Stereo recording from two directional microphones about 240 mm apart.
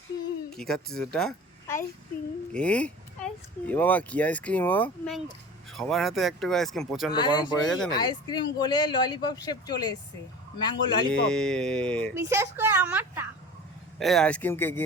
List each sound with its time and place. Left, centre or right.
0.5 s a woman's voice: centre
7.1 s speech: centre
7.6 s speech: centre
7.9 s speech: centre
11.1 s speech: centre
12.1 s a child's voice: centre